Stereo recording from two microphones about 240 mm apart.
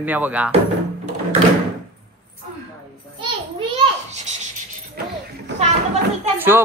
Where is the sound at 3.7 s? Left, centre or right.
Right.